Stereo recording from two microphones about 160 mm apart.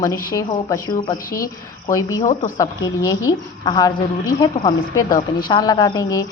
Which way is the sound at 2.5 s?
20° left (ahead or behind).